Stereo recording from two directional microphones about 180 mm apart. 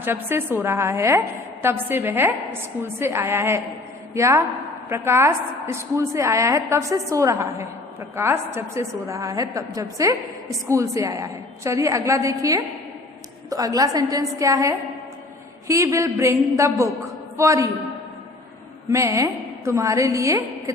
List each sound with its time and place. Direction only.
0.0 s a woman's voice: 10° right (ahead or behind)
18.9 s a woman's voice: 15° right (ahead or behind)